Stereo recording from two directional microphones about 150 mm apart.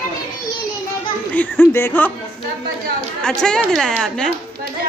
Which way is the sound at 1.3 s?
10° left (ahead or behind).